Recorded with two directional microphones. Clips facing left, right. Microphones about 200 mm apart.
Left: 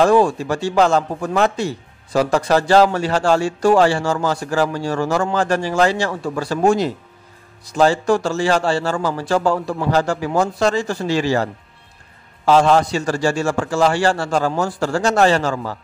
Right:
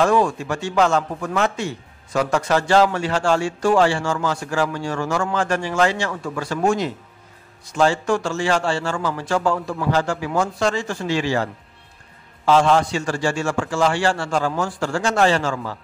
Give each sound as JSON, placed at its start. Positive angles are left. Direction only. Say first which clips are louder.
{"t": 0.0, "sound": "a man's voice", "louder": "left 4 dB", "side_deg": 35}
{"t": 12.4, "sound": "a man's voice", "louder": "left 2 dB", "side_deg": 40}